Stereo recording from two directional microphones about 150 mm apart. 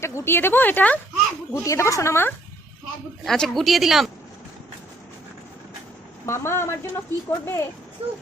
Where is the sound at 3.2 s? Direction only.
Centre (ahead or behind).